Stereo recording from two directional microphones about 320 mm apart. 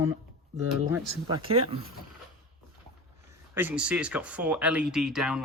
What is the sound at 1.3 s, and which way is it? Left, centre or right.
Speech, centre.